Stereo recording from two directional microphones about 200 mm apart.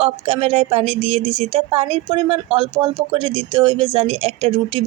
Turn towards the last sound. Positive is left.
turn(degrees=-25)  # may be behind; listen again after turning